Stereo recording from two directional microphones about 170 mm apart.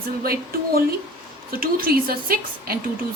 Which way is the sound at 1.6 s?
60° right (ahead or behind).